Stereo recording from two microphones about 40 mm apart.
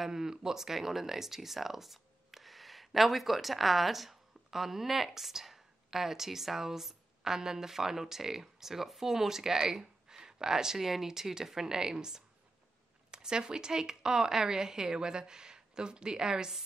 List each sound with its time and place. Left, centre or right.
0.0 s speech: centre